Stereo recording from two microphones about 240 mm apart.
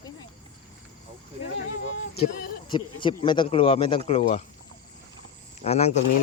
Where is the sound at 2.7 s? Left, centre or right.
Centre.